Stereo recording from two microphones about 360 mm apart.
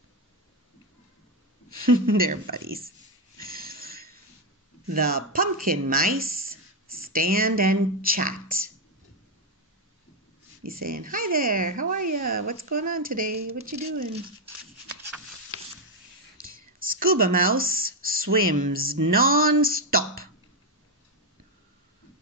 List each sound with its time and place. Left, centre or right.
2.1 s speech: right
3.4 s snort: right
4.8 s speech: right
10.6 s speech: right
16.4 s speech: right